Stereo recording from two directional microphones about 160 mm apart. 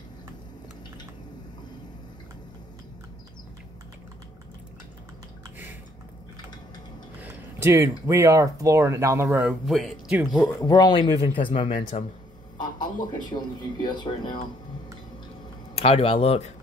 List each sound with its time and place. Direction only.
7.2 s speech: 10° right (ahead or behind)
9.7 s speech: centre (ahead or behind)
10.6 s speech: 25° left (ahead or behind)
12.5 s a sound: 25° left (ahead or behind)
13.8 s speech: 30° left (ahead or behind)
15.7 s speech: 35° left (ahead or behind)